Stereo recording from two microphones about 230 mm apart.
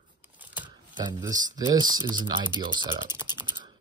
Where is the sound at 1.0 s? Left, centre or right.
Centre.